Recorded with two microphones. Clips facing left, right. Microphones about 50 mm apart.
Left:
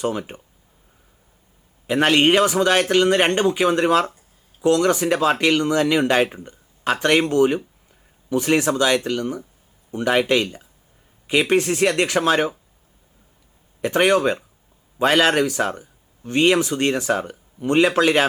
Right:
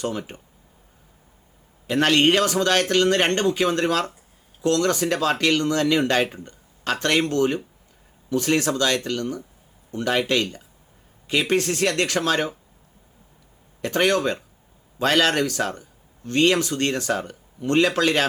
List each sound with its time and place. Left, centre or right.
0.0 s speech: centre
1.9 s speech: centre
13.8 s speech: centre